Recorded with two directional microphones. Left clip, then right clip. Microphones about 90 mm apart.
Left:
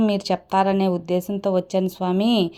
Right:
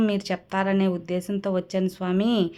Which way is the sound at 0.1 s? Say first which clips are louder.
Left 6 dB; 30° left (ahead or behind).